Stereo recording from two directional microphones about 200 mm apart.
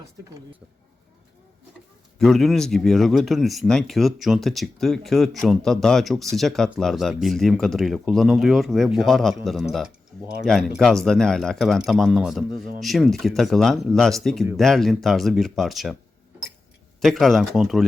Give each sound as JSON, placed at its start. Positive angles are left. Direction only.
{"t": 2.1, "sound": "speech", "side_deg": 0}
{"t": 17.0, "sound": "speech", "side_deg": 0}